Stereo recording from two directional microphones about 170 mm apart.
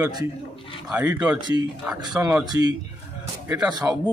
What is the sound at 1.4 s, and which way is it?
A man's voice, 25° right (ahead or behind).